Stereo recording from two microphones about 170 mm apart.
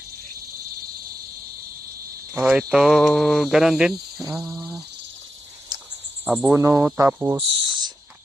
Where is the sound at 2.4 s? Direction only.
5° right (ahead or behind).